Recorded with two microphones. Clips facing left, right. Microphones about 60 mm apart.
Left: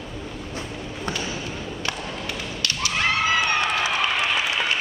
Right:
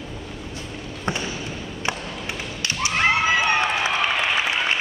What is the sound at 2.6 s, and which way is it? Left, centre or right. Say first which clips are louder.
Thump: right 3 dB; right.